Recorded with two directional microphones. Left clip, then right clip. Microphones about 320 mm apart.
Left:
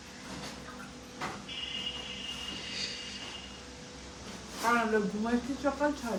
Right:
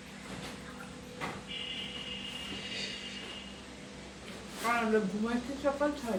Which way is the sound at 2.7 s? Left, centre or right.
Centre.